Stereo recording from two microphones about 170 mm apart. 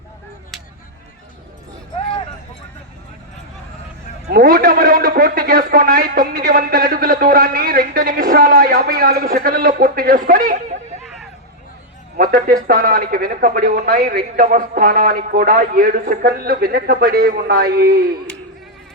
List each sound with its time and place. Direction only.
4.3 s speech: 65° right (ahead or behind)
12.1 s speech: 55° right (ahead or behind)